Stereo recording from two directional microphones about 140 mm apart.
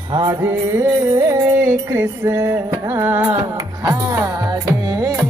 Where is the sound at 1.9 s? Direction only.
15° right (ahead or behind).